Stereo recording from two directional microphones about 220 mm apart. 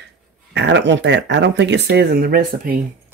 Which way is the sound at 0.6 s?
55° right (ahead or behind).